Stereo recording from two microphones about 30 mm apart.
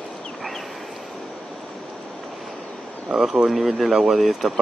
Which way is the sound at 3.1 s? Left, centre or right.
Right.